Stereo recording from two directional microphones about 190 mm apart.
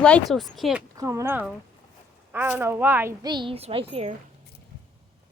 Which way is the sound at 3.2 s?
25° right (ahead or behind).